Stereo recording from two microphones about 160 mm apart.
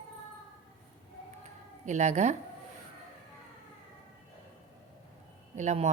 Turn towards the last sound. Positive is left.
turn(degrees=-45)  # may be behind; listen again after turning